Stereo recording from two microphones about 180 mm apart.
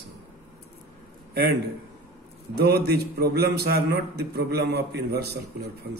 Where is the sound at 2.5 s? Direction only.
60° right (ahead or behind).